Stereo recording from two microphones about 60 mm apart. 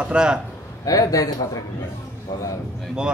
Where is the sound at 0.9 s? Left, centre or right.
Left.